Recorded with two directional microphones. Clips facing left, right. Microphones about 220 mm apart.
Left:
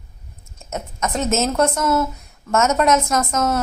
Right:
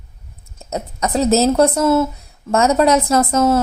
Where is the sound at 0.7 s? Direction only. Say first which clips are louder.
Right 4 dB; 35° right (ahead or behind).